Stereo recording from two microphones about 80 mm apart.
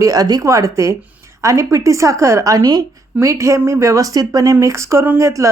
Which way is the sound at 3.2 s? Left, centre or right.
Right.